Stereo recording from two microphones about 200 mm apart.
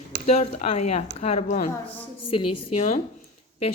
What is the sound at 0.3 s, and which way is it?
Speech, 30° left (ahead or behind).